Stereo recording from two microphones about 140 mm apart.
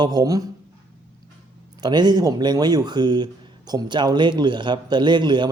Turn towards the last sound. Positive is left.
turn(degrees=-35)  # may be behind; listen again after turning